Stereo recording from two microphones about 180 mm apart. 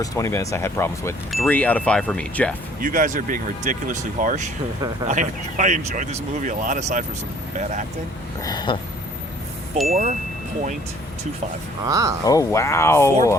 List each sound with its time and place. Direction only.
0.0 s speech: 15° left (ahead or behind)
1.3 s speech: 5° left (ahead or behind)
2.8 s speech: 50° right (ahead or behind)
8.4 s a sound: 20° left (ahead or behind)
9.9 s speech: 40° right (ahead or behind)
11.9 s speech: 20° right (ahead or behind)
12.2 s speech: 20° left (ahead or behind)